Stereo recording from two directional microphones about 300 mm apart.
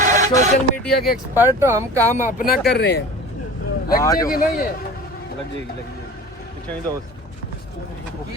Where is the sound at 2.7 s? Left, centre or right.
Left.